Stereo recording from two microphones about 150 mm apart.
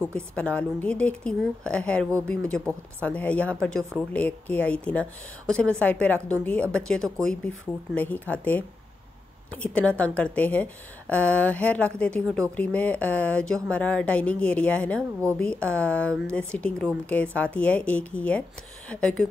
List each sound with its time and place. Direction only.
0.4 s a woman's voice: 10° left (ahead or behind)